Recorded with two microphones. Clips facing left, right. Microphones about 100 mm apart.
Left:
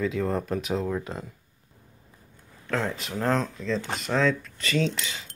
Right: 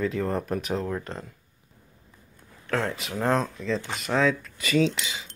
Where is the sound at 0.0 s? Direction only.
Centre (ahead or behind).